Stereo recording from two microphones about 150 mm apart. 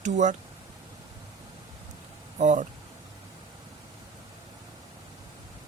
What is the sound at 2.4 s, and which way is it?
Speech, 50° right (ahead or behind).